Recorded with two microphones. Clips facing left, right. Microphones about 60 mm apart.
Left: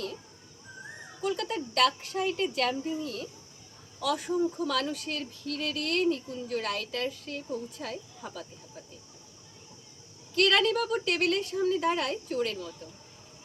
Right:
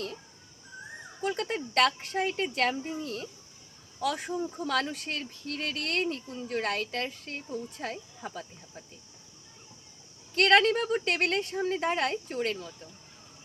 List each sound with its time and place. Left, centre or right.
1.2 s speech: right
10.3 s speech: right